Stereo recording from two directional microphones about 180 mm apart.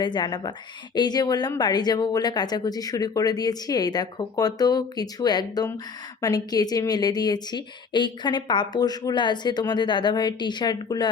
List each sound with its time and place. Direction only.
0.0 s a woman's voice: 25° left (ahead or behind)